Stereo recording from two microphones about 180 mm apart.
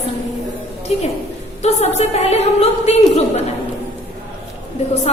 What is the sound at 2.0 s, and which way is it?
A woman's voice, 35° left (ahead or behind).